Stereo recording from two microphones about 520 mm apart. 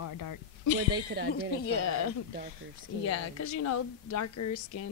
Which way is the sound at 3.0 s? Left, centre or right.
Left.